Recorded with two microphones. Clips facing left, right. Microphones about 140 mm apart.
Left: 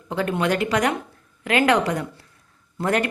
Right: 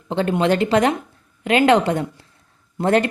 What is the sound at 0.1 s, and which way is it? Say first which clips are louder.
A woman's voice: right 4 dB; 25° right (ahead or behind).